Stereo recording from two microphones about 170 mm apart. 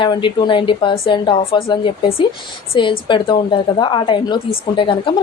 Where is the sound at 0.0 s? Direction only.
25° left (ahead or behind).